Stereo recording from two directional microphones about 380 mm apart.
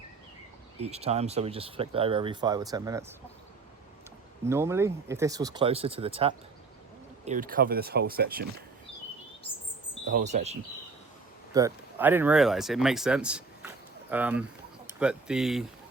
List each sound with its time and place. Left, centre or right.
0.8 s speech: centre
4.4 s speech: centre; by 8.4 s right
10.1 s speech: centre
11.5 s speech: centre